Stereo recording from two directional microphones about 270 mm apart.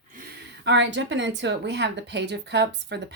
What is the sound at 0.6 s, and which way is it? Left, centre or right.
A woman's voice, right.